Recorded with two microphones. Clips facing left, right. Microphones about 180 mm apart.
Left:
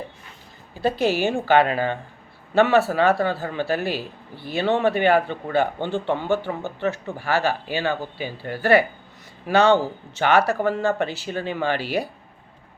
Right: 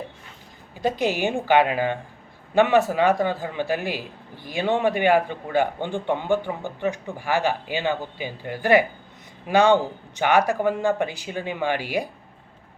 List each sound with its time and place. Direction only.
0.8 s a man's voice: 15° right (ahead or behind)